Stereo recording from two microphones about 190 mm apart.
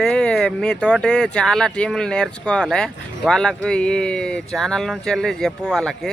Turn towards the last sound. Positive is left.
turn(degrees=0)  # may be behind; listen again after turning